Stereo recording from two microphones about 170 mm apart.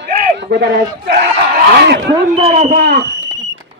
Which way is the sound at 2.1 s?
35° right (ahead or behind).